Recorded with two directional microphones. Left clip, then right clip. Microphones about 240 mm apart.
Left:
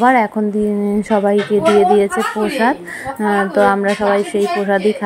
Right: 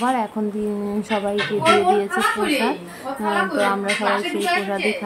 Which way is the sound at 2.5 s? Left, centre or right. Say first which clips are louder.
Left 6 dB; left.